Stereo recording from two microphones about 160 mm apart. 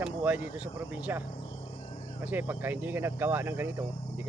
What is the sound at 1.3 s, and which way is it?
Cricket, 40° left (ahead or behind).